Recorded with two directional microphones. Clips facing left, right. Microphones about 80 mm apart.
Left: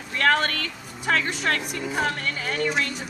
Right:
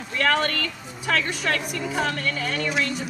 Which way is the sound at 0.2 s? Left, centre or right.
Left.